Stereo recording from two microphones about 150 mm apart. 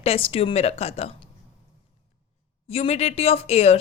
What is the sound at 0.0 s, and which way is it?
Speech, 40° left (ahead or behind).